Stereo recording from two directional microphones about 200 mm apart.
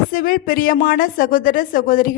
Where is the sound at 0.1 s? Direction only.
45° left (ahead or behind).